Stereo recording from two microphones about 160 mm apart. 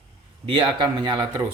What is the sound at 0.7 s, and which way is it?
Speech, 25° right (ahead or behind).